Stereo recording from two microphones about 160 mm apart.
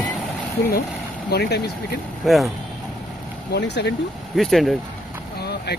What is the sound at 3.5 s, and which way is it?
Speech, 90° left.